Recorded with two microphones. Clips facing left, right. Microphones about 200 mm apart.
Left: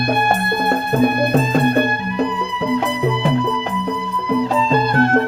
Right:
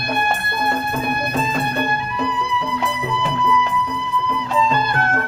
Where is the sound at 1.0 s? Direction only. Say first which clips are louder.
Left 7 dB; 50° left (ahead or behind).